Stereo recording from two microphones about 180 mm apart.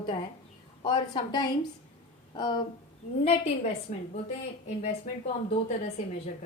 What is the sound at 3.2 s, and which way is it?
Speech, 35° left (ahead or behind).